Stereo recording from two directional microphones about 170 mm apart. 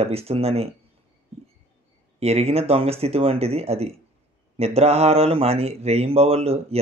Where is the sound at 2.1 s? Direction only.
35° right (ahead or behind).